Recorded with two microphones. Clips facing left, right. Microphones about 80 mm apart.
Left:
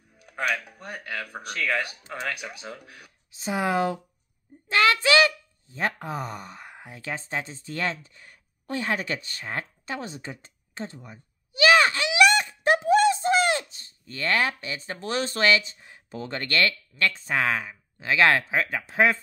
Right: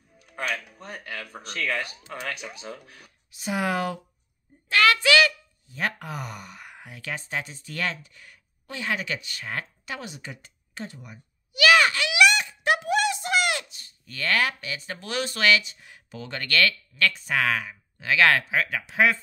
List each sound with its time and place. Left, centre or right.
3.3 s speech: left
4.6 s a sound: left
5.0 s speech: left